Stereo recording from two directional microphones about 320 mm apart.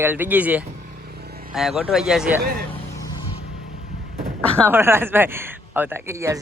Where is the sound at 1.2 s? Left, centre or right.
Right.